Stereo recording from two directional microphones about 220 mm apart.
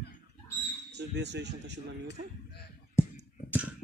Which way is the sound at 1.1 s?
50° right (ahead or behind).